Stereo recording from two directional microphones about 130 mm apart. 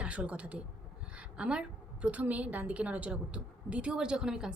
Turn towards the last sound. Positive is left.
turn(degrees=-5)  # may be behind; listen again after turning